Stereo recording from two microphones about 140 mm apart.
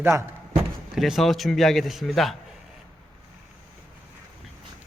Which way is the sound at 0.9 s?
Centre (ahead or behind).